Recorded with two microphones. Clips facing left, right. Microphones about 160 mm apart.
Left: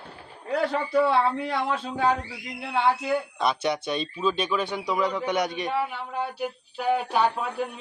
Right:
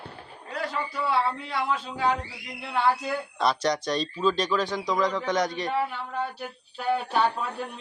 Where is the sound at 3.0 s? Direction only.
10° left (ahead or behind).